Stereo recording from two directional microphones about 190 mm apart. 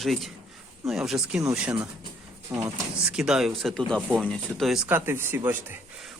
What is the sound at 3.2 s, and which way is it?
Speech, 5° right (ahead or behind).